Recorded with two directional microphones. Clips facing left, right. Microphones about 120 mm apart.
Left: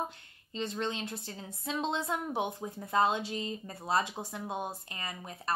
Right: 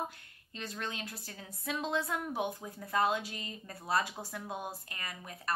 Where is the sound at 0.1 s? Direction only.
25° left (ahead or behind).